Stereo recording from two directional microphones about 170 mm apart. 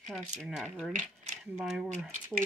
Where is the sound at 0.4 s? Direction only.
5° right (ahead or behind).